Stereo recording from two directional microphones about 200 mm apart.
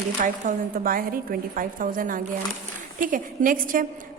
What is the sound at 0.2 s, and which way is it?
A woman's voice, 45° right (ahead or behind).